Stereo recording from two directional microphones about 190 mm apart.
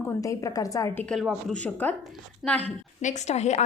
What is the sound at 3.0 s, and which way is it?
Speech, 35° left (ahead or behind).